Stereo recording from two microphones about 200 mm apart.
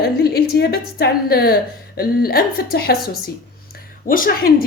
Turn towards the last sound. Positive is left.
turn(degrees=45)  # may be behind; listen again after turning